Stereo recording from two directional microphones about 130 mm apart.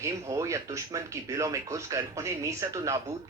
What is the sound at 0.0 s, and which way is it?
Speech, 25° right (ahead or behind).